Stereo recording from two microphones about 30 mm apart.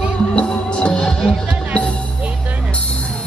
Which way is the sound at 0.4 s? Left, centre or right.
Left.